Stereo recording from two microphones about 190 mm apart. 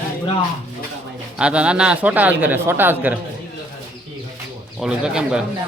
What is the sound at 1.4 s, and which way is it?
Speech, 5° right (ahead or behind).